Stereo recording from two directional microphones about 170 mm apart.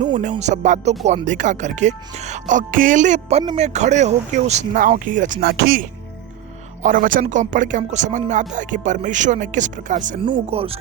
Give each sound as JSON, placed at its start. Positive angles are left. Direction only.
{"t": 0.0, "sound": "speech", "side_deg": -45}
{"t": 10.2, "sound": "speech", "side_deg": -30}